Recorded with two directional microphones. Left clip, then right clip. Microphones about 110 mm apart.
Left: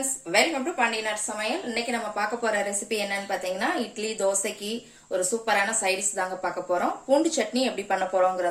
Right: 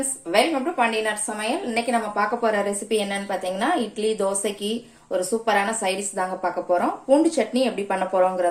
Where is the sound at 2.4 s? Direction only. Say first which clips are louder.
Right 3 dB; 45° right (ahead or behind).